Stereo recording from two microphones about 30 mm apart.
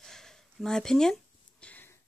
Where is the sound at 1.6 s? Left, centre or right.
Left.